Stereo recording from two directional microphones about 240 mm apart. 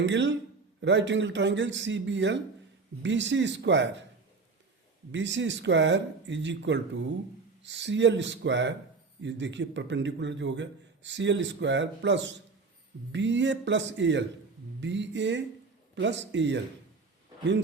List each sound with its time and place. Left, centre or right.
0.0 s a man's voice: right
5.1 s a man's voice: right